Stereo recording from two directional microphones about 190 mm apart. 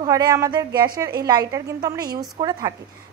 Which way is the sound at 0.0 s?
20° right (ahead or behind).